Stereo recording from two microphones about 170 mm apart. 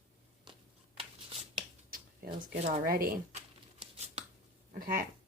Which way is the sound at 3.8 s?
40° right (ahead or behind).